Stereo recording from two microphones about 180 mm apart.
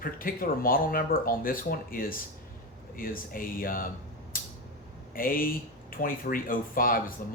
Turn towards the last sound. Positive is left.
turn(degrees=50)  # may be behind; listen again after turning